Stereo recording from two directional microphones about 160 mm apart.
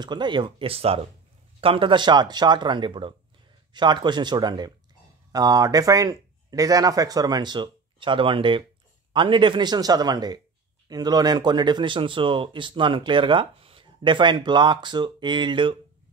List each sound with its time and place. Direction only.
0.0 s speech: 30° right (ahead or behind)